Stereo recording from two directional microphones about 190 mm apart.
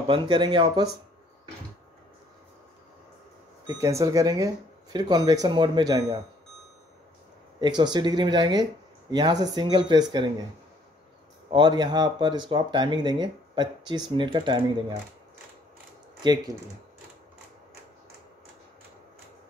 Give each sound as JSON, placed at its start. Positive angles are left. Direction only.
{"t": 0.1, "sound": "speech", "side_deg": -25}
{"t": 3.6, "sound": "speech", "side_deg": -15}
{"t": 7.6, "sound": "speech", "side_deg": -20}
{"t": 11.5, "sound": "speech", "side_deg": -25}
{"t": 16.2, "sound": "speech", "side_deg": -25}